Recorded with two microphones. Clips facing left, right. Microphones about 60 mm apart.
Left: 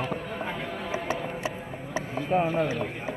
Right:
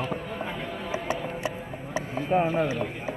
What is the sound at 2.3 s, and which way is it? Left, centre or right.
Speech, centre.